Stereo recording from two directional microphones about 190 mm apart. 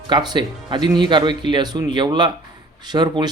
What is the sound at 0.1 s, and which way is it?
A man's voice, 25° right (ahead or behind).